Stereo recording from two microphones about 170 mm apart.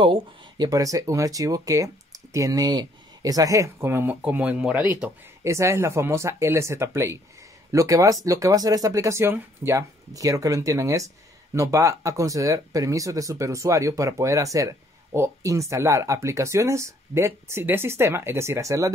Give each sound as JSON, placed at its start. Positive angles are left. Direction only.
{"t": 0.0, "sound": "speech", "side_deg": -25}